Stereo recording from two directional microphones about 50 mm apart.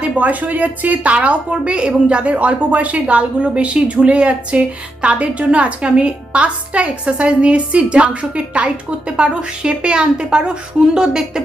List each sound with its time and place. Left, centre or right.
0.0 s a woman's voice: right; by 11.4 s centre